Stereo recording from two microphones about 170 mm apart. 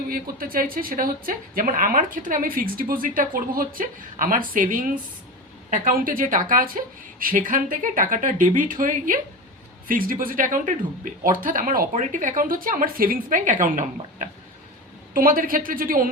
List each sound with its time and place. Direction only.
0.1 s a woman's voice: 60° right (ahead or behind)